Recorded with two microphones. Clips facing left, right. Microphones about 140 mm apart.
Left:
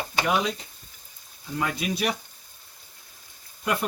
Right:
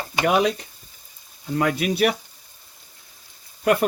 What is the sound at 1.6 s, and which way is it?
Speech, 65° right (ahead or behind).